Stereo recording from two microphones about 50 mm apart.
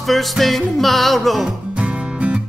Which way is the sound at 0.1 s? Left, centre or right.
Centre.